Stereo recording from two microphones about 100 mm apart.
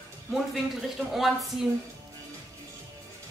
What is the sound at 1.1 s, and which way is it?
Speech, centre (ahead or behind).